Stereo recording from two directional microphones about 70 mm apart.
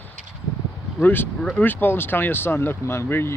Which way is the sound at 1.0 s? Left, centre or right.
Left.